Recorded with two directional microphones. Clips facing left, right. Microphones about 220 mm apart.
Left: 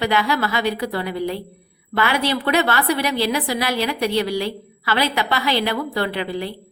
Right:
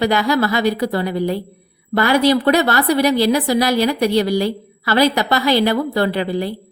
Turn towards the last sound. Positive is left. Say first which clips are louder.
# right 5 dB
turn(degrees=-40)  # may be behind; listen again after turning